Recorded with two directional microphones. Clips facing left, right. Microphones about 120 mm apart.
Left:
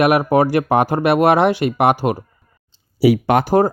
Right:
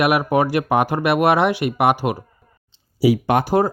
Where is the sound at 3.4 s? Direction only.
45° left (ahead or behind).